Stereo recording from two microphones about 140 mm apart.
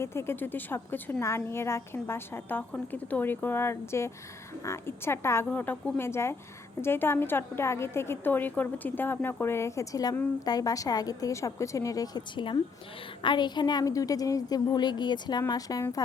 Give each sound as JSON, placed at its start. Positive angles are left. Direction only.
{"t": 0.0, "sound": "a woman's voice", "side_deg": 20}